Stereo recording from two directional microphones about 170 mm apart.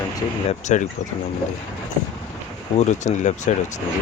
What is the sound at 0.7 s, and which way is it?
Speech, 45° left (ahead or behind).